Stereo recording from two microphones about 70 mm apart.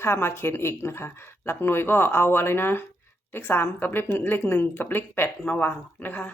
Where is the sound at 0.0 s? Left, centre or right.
Left.